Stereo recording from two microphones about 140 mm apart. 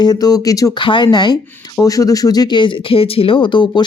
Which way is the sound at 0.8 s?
35° left (ahead or behind).